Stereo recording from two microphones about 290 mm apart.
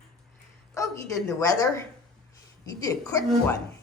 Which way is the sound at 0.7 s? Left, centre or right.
Centre.